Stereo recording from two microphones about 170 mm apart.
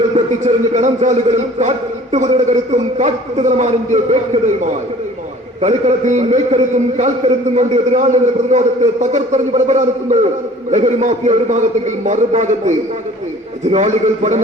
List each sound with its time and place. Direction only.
0.4 s a man's voice: 45° right (ahead or behind)